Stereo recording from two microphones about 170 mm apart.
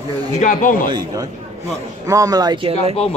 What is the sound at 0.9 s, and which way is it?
Speech, 20° right (ahead or behind).